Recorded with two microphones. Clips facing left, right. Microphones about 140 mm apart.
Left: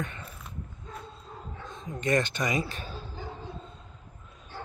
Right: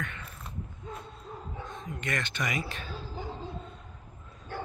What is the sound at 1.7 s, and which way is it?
Speech, 35° left (ahead or behind).